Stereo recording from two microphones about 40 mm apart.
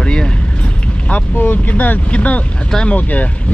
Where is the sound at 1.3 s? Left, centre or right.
Left.